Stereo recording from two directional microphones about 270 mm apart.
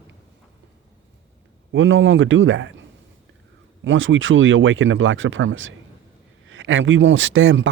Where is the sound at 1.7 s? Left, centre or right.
Right.